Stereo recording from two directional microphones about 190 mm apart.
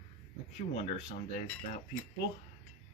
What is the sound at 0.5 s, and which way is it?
Cutlery, 35° left (ahead or behind).